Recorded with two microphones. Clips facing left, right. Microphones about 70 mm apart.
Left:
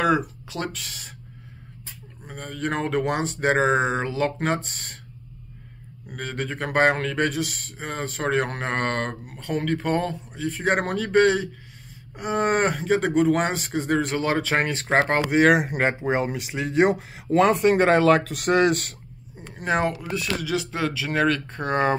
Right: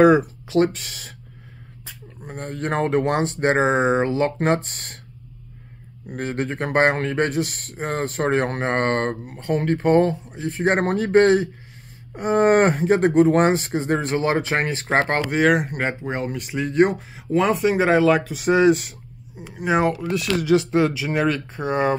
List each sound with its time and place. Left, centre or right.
0.0 s speech: right
2.2 s speech: right
6.0 s speech: right
7.4 s speech: right
8.3 s speech: right
15.0 s speech: centre
20.0 s speech: centre
20.4 s speech: right; by 21.9 s centre